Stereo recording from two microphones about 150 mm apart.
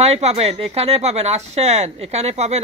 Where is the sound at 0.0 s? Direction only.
45° right (ahead or behind).